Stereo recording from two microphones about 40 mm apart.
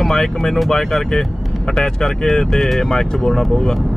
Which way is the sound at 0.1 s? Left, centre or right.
Centre.